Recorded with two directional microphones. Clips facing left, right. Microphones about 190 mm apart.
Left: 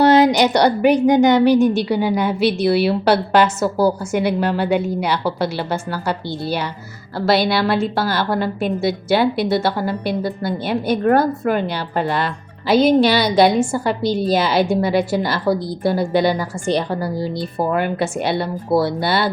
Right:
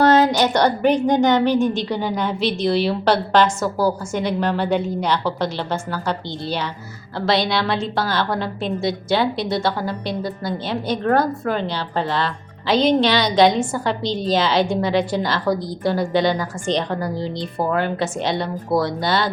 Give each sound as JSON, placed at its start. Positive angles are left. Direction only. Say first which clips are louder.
{"t": 0.0, "sound": "a woman's voice", "louder": "left 3 dB", "side_deg": 10}